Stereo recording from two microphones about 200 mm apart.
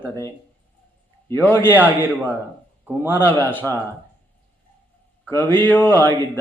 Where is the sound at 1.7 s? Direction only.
10° right (ahead or behind).